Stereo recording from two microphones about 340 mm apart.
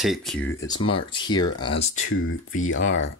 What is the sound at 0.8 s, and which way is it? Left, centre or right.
Speech, centre.